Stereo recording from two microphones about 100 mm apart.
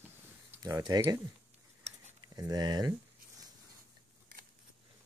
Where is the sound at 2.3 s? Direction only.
40° right (ahead or behind).